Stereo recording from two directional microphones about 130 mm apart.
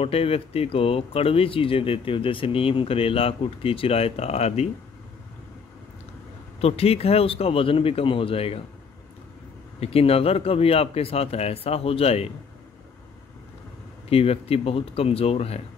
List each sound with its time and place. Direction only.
0.0 s speech: 50° left (ahead or behind)
6.6 s speech: 50° left (ahead or behind)
9.8 s speech: 50° left (ahead or behind)
14.0 s speech: 50° left (ahead or behind)